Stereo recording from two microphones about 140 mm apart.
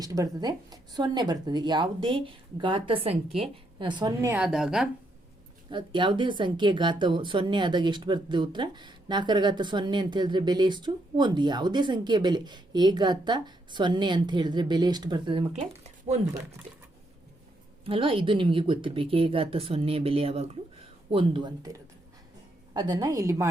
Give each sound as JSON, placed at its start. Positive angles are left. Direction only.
{"t": 0.0, "sound": "speech", "side_deg": -25}
{"t": 4.4, "sound": "a woman's voice", "side_deg": -5}
{"t": 5.7, "sound": "speech", "side_deg": -35}
{"t": 15.8, "sound": "a sound", "side_deg": -50}
{"t": 17.8, "sound": "a woman's voice", "side_deg": -40}